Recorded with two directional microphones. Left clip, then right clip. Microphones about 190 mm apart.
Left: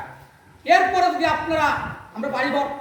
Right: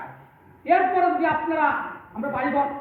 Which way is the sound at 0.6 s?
30° left (ahead or behind).